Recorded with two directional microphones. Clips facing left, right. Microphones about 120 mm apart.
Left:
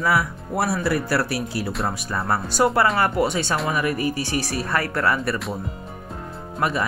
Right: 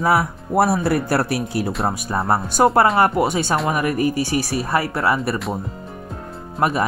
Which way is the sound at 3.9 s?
35° left (ahead or behind).